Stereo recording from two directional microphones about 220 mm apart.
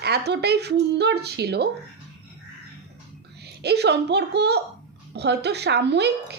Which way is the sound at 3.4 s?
50° right (ahead or behind).